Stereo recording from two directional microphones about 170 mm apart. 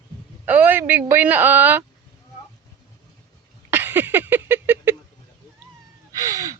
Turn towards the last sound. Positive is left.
turn(degrees=-20)  # may be behind; listen again after turning